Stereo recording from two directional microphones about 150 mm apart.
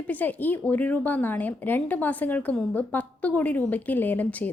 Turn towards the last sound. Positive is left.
turn(degrees=10)  # may be behind; listen again after turning